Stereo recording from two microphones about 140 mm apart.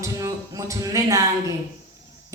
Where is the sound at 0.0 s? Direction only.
20° right (ahead or behind).